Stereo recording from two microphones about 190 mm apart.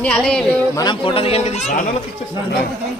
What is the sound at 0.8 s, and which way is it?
A man's voice, 25° left (ahead or behind).